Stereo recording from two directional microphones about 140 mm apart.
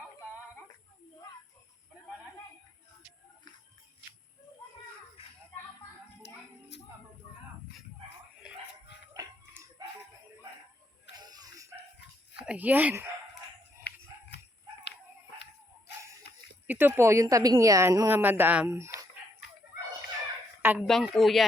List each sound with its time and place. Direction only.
9.1 s a sound: 25° right (ahead or behind)
11.1 s a sound: 30° right (ahead or behind)
12.5 s speech: 10° right (ahead or behind)
16.6 s a woman's voice: 15° right (ahead or behind)
20.6 s fowl: 15° right (ahead or behind)
20.8 s speech: centre (ahead or behind)